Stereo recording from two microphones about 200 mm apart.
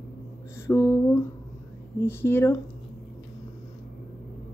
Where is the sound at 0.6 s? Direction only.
10° left (ahead or behind).